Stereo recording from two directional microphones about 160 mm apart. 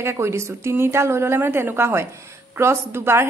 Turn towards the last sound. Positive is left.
turn(degrees=-15)  # may be behind; listen again after turning